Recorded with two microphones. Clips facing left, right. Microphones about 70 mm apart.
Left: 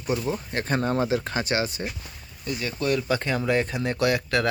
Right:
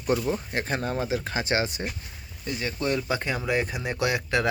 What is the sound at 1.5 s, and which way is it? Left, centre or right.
Speech, right.